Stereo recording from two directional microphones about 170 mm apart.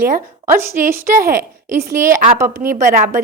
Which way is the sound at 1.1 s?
55° right (ahead or behind).